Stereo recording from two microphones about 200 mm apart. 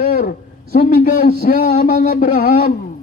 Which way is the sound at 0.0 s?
45° left (ahead or behind).